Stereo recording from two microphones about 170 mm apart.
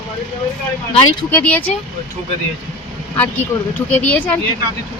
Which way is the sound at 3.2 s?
10° left (ahead or behind).